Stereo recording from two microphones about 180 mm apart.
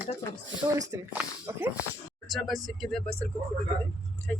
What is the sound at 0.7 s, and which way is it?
Speech, 15° right (ahead or behind).